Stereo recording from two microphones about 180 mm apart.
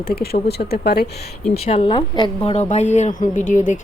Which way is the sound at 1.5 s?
35° left (ahead or behind).